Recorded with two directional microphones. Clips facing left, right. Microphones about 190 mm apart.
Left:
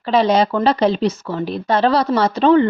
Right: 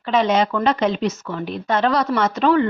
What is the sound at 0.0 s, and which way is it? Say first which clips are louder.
Speech: left 3 dB; 35° left (ahead or behind).